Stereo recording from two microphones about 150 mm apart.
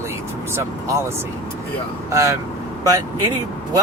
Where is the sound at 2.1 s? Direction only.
20° right (ahead or behind).